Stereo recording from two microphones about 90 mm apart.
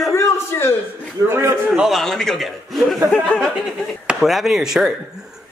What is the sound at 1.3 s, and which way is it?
Speech, 30° right (ahead or behind).